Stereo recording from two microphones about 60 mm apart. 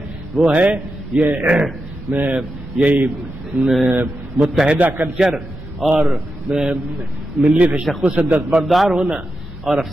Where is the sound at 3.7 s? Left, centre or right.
Centre.